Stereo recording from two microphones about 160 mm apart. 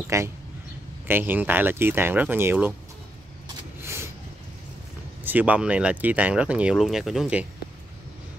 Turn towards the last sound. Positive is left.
turn(degrees=-5)  # may be behind; listen again after turning